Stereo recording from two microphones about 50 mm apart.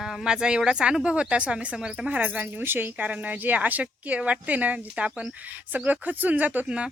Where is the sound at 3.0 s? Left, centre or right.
Right.